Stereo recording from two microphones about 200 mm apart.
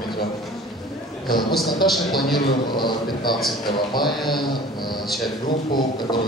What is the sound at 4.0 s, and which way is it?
A man's voice, centre (ahead or behind).